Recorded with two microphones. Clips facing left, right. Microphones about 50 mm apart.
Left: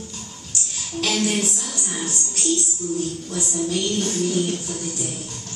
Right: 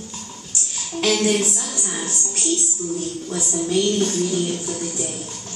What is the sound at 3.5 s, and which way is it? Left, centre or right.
Speech, centre.